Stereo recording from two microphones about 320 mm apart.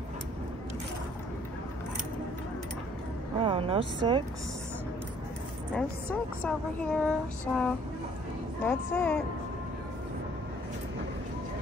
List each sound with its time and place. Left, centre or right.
3.3 s speech: centre
5.8 s a woman's voice: centre